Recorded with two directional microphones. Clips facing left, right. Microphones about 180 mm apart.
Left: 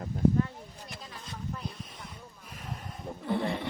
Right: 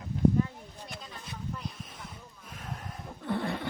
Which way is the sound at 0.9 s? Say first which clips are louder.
Right 1 dB; centre (ahead or behind).